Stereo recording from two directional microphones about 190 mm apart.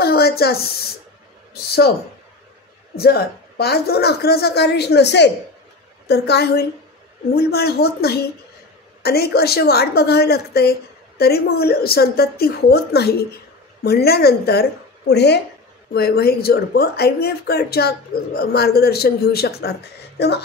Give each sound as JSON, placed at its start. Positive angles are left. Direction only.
{"t": 0.0, "sound": "a sound", "side_deg": 55}
{"t": 1.5, "sound": "a woman's voice", "side_deg": 55}
{"t": 3.0, "sound": "a woman's voice", "side_deg": 55}